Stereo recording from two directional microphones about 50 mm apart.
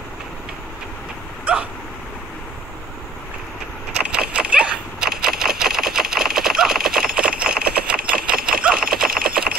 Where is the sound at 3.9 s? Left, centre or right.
Right.